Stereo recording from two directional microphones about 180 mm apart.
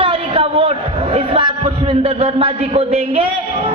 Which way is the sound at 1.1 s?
30° right (ahead or behind).